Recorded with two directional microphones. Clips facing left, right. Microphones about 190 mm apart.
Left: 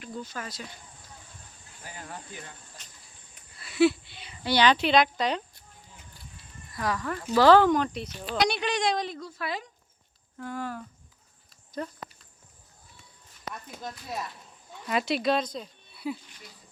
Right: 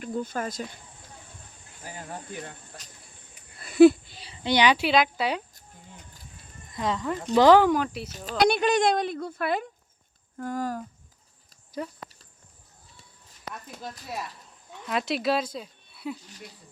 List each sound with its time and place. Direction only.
0.0 s speech: 50° right (ahead or behind)
2.1 s speech: 55° right (ahead or behind)
3.6 s a sound: 45° right (ahead or behind)
4.4 s speech: 15° right (ahead or behind)
6.7 s speech: 20° right (ahead or behind)
8.3 s speech: 50° right (ahead or behind)
10.3 s speech: 40° right (ahead or behind)
11.8 s speech: 10° right (ahead or behind)
13.5 s speech: 5° right (ahead or behind)